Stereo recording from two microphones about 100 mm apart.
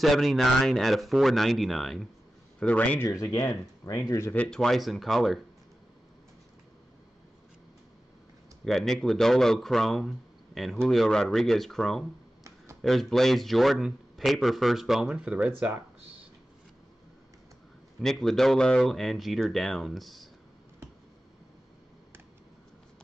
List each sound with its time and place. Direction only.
0.0 s speech: centre (ahead or behind)
2.6 s speech: 15° left (ahead or behind)
3.1 s speech: 30° left (ahead or behind)
4.5 s speech: 5° left (ahead or behind)
8.6 s speech: 5° left (ahead or behind); by 15.7 s 10° right (ahead or behind)
18.0 s speech: 5° left (ahead or behind)